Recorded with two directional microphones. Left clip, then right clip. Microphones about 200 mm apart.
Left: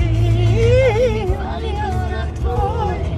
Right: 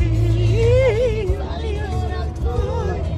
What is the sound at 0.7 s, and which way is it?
Music, 5° left (ahead or behind).